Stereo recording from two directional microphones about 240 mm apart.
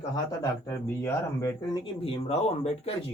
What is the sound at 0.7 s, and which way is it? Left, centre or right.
Speech, centre.